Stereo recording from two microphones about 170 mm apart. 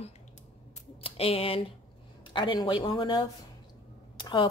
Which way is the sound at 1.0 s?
35° left (ahead or behind).